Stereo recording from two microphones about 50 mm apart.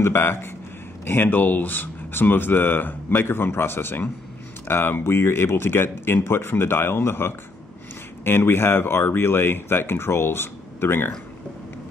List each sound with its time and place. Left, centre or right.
0.0 s speech: left